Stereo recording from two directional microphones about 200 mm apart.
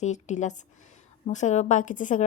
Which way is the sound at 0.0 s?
35° left (ahead or behind).